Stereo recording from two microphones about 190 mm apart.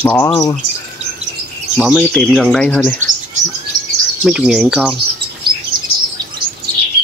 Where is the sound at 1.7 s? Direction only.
Centre (ahead or behind).